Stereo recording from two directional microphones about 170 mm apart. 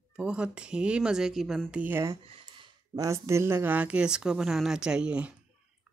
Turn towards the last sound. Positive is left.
turn(degrees=-5)  # may be behind; listen again after turning